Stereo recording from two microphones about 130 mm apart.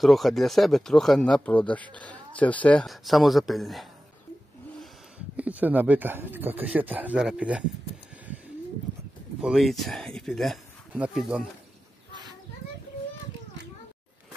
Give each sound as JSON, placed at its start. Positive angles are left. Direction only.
{"t": 0.0, "sound": "speech", "side_deg": 0}
{"t": 2.9, "sound": "speech", "side_deg": 0}
{"t": 5.3, "sound": "speech", "side_deg": -10}
{"t": 9.4, "sound": "speech", "side_deg": 0}
{"t": 12.1, "sound": "children playing", "side_deg": -35}